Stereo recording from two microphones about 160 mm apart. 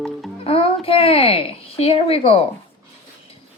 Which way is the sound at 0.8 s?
35° left (ahead or behind).